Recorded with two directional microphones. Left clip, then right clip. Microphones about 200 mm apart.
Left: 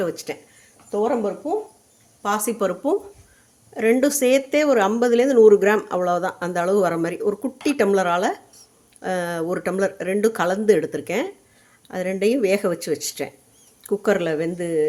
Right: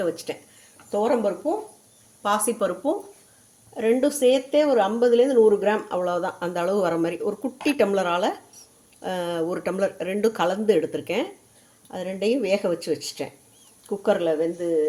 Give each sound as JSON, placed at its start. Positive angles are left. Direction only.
{"t": 0.0, "sound": "speech", "side_deg": 25}
{"t": 0.9, "sound": "speech", "side_deg": 10}
{"t": 2.2, "sound": "speech", "side_deg": 20}
{"t": 13.8, "sound": "speech", "side_deg": 30}